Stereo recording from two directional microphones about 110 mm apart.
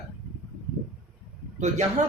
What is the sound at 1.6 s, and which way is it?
Speech, 90° right.